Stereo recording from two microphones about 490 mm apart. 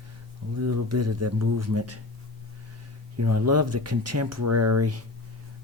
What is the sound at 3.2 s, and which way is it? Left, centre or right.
Speech, right.